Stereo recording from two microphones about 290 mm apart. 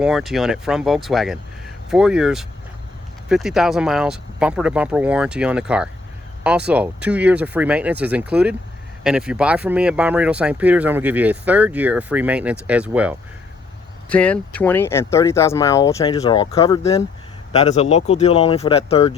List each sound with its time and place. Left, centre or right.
0.0 s speech: centre; by 19.1 s left